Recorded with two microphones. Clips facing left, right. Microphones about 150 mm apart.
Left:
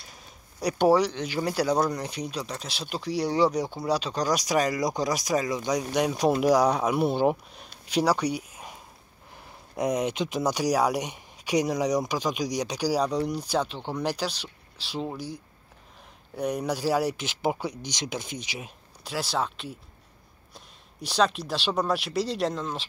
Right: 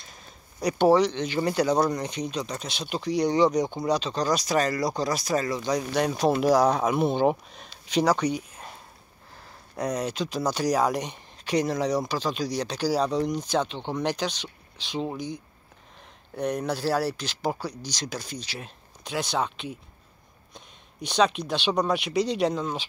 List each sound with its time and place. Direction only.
0.0 s speech: 10° left (ahead or behind)
18.6 s speech: 5° left (ahead or behind)